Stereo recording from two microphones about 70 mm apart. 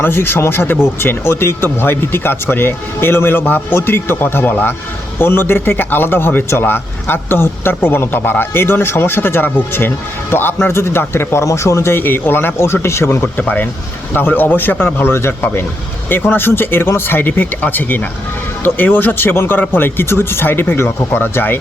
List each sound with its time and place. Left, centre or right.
0.0 s speech: left